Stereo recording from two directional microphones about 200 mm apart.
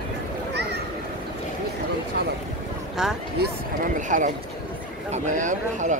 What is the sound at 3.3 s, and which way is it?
Speech, 50° right (ahead or behind).